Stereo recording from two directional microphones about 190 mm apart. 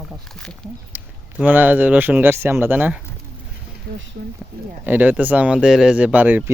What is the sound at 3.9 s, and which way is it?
Speech, 50° right (ahead or behind).